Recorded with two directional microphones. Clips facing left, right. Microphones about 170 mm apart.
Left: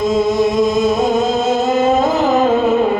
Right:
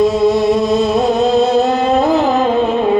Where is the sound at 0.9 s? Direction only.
65° right (ahead or behind).